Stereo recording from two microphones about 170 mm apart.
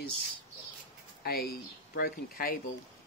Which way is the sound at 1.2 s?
65° left (ahead or behind).